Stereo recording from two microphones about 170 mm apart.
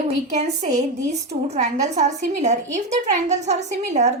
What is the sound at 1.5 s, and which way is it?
A woman's voice, 40° right (ahead or behind).